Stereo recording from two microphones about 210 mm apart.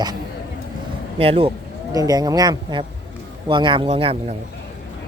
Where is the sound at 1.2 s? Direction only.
25° right (ahead or behind).